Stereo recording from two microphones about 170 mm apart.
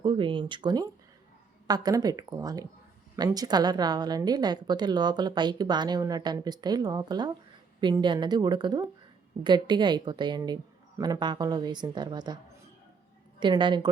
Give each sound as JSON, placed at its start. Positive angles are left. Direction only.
{"t": 0.0, "sound": "a woman's voice", "side_deg": -30}
{"t": 13.4, "sound": "a woman's voice", "side_deg": -25}